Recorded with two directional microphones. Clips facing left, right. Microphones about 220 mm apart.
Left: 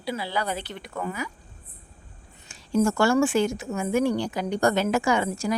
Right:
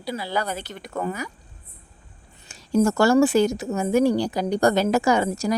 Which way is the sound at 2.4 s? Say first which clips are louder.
Right 3 dB; 40° right (ahead or behind).